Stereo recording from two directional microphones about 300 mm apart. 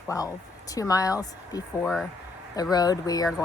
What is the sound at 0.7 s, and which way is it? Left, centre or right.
A woman's voice, centre.